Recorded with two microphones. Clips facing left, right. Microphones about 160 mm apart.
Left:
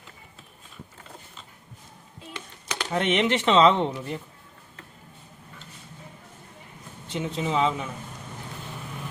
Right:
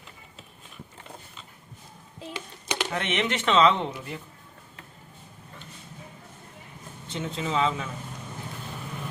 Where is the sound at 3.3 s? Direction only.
30° left (ahead or behind).